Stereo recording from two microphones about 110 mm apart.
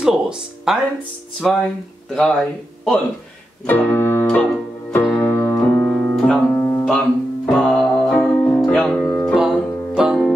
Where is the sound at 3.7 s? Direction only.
20° left (ahead or behind).